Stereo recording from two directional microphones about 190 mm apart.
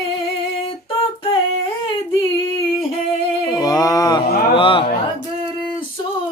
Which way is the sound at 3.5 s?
20° left (ahead or behind).